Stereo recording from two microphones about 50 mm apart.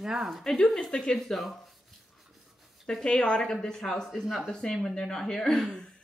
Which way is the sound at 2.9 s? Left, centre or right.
Centre.